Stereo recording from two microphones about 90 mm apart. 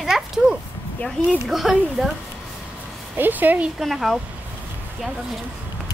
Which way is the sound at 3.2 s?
20° right (ahead or behind).